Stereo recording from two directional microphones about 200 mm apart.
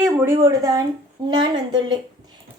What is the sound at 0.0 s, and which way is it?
A woman's voice, 10° right (ahead or behind).